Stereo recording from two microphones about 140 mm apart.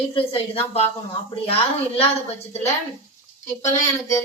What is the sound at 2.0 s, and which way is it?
Speech, 50° left (ahead or behind).